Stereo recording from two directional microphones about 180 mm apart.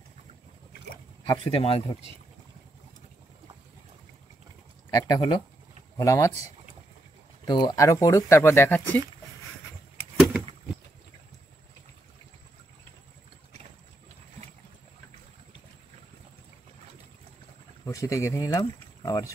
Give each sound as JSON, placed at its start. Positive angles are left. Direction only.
{"t": 1.2, "sound": "speech", "side_deg": 30}
{"t": 5.0, "sound": "speech", "side_deg": 20}
{"t": 7.4, "sound": "speech", "side_deg": 25}
{"t": 10.1, "sound": "a sound", "side_deg": 0}
{"t": 17.8, "sound": "speech", "side_deg": 15}